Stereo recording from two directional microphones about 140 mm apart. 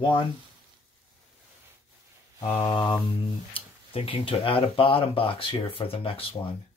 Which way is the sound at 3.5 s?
40° left (ahead or behind).